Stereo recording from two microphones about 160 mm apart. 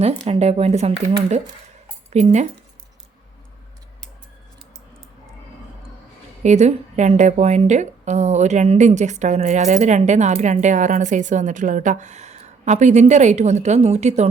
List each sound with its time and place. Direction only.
0.3 s a woman's voice: 40° right (ahead or behind)
6.4 s a woman's voice: 45° right (ahead or behind)